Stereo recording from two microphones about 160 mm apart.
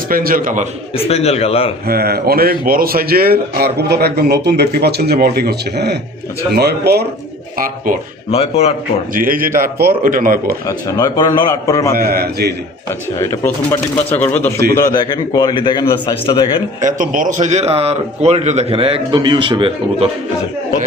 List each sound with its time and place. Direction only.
0.1 s speech: 65° right (ahead or behind)
0.9 s speech: 40° left (ahead or behind)
1.9 s a man's voice: 75° right (ahead or behind); by 7.0 s 90° right
8.3 s speech: 40° left (ahead or behind)
9.1 s speech: 60° right (ahead or behind)
10.7 s a man's voice: 25° left (ahead or behind)
11.9 s a man's voice: 70° right (ahead or behind)
13.1 s speech: 15° left (ahead or behind)
14.9 s a man's voice: 25° left (ahead or behind)
16.8 s a man's voice: 55° right (ahead or behind); by 20.1 s 35° right (ahead or behind)